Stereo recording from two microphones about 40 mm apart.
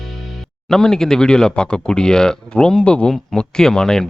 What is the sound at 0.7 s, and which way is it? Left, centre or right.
Speech, centre.